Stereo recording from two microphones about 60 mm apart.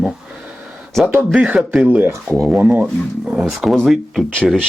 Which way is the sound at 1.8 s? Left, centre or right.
Right.